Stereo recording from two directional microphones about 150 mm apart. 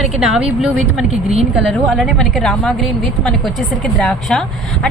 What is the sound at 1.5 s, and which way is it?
Speech, centre (ahead or behind).